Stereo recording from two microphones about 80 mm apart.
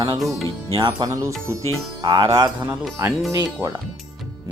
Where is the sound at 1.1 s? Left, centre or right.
Right.